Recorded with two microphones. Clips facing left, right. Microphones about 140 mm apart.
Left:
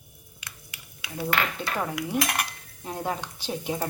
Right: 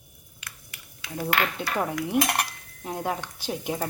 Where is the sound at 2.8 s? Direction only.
10° right (ahead or behind).